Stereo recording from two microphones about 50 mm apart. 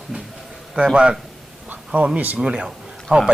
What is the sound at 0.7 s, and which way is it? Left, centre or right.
Speech, right.